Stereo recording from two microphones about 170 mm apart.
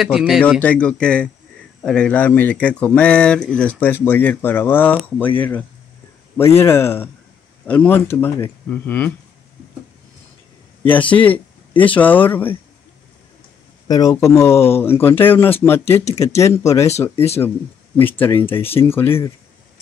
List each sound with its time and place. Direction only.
0.0 s speech: centre (ahead or behind)
6.3 s speech: 15° left (ahead or behind)
10.8 s speech: 10° left (ahead or behind)
13.8 s speech: 20° left (ahead or behind)
17.9 s speech: 10° left (ahead or behind)